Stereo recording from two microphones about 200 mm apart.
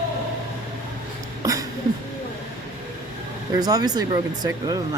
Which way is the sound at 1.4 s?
15° right (ahead or behind).